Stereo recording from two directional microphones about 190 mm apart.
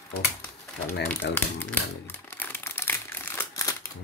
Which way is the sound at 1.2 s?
65° left (ahead or behind).